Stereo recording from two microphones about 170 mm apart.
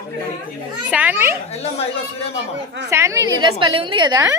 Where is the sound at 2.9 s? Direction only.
15° right (ahead or behind).